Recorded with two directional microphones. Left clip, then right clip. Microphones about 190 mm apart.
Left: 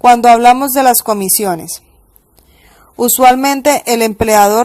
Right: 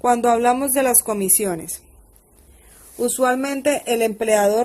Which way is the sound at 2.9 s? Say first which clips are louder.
Left 11 dB; 40° left (ahead or behind).